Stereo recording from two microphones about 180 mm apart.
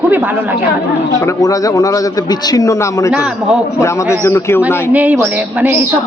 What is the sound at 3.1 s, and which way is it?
Speech, 5° right (ahead or behind).